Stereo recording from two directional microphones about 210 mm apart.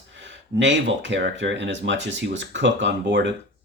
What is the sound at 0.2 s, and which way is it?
Speech, 60° right (ahead or behind).